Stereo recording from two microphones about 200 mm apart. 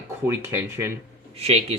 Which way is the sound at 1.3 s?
30° right (ahead or behind).